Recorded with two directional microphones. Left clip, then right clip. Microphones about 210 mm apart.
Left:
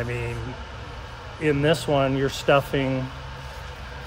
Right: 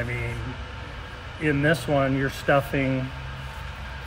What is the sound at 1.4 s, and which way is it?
Speech, 30° left (ahead or behind).